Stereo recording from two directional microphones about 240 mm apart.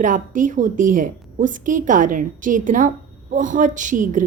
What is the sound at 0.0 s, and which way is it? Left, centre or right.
A woman's voice, right.